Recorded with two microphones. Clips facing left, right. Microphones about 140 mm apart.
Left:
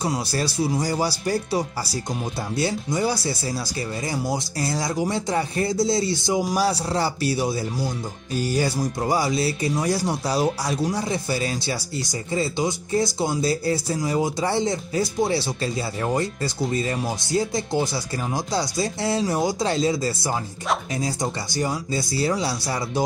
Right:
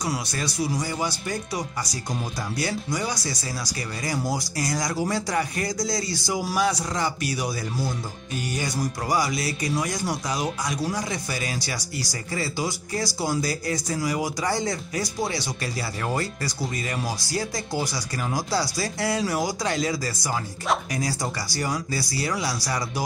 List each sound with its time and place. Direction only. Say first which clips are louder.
0.0 s speech: left 4 dB; 30° left (ahead or behind)